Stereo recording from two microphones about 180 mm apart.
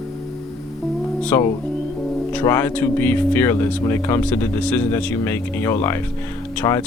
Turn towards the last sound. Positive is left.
turn(degrees=15)  # may be behind; listen again after turning